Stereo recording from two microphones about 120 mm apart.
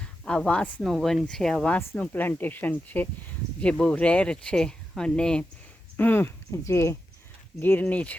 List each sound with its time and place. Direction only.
0.0 s speech: 10° left (ahead or behind)